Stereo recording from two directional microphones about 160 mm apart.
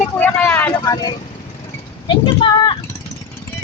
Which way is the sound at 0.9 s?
25° left (ahead or behind).